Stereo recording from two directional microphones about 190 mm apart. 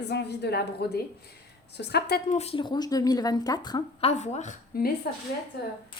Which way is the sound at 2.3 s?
35° left (ahead or behind).